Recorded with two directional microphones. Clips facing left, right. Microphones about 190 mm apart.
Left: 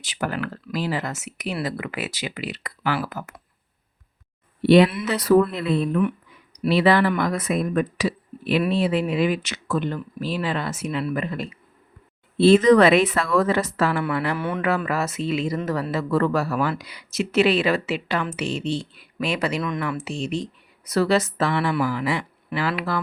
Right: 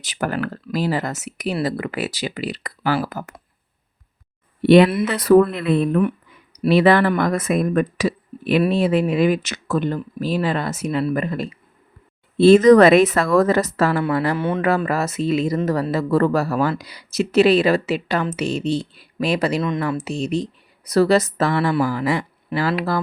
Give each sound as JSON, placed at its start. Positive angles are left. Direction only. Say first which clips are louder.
{"t": 0.0, "sound": "speech", "louder": "right 3 dB", "side_deg": -45}
{"t": 4.6, "sound": "speech", "louder": "right 3 dB", "side_deg": -55}
{"t": 14.3, "sound": "speech", "louder": "right 5 dB", "side_deg": -25}
{"t": 14.8, "sound": "speech", "louder": "right 4 dB", "side_deg": -40}